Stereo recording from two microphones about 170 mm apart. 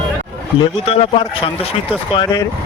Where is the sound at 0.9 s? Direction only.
35° left (ahead or behind).